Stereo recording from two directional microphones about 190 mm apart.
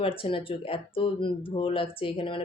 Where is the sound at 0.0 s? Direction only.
30° left (ahead or behind).